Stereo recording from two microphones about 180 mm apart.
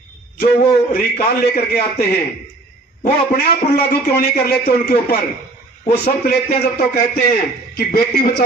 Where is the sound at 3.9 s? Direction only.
55° left (ahead or behind).